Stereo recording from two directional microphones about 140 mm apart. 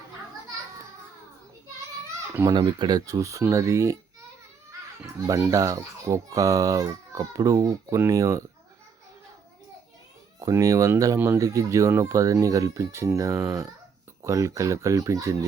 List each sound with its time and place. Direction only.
2.3 s speech: 20° right (ahead or behind)
2.6 s speech: 30° right (ahead or behind)
5.2 s speech: 25° right (ahead or behind)
10.4 s speech: 25° right (ahead or behind)